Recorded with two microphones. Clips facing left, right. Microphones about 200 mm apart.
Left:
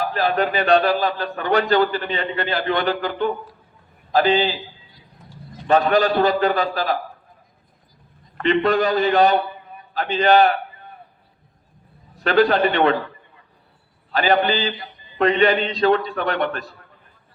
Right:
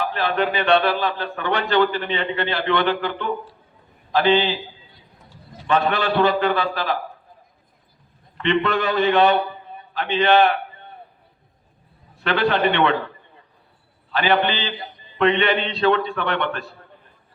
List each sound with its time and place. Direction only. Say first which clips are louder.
0.0 s a man's voice: left 2 dB; 40° left (ahead or behind)
5.6 s a man's voice: left 4 dB; 40° left (ahead or behind)
8.4 s a man's voice: left 3 dB; 40° left (ahead or behind)
12.1 s a man's voice: left 4 dB; 40° left (ahead or behind)
14.1 s a man's voice: left 2 dB; 40° left (ahead or behind)